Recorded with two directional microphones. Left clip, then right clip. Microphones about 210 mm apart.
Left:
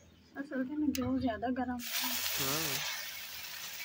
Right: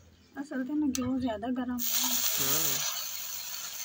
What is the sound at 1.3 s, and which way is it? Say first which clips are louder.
Speech: right 1 dB; 35° right (ahead or behind).